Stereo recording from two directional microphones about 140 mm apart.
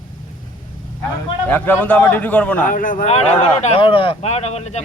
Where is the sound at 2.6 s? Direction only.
75° left (ahead or behind).